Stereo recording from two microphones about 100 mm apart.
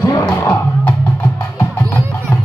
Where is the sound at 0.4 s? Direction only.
20° left (ahead or behind).